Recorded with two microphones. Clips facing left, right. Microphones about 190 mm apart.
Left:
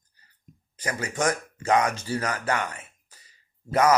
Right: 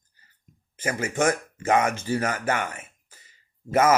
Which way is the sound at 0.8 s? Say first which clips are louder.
Right 3 dB; 25° right (ahead or behind).